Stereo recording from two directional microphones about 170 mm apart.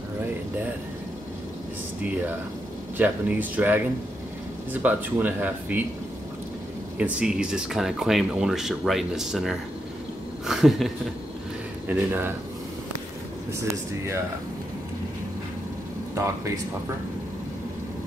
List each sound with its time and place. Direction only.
3.0 s speech: 10° right (ahead or behind)
4.8 s speech: 10° right (ahead or behind)
7.0 s speech: 5° right (ahead or behind)
11.9 s speech: 10° right (ahead or behind)
13.5 s speech: 15° right (ahead or behind)